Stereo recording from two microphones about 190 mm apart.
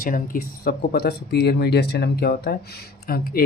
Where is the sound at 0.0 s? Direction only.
50° left (ahead or behind).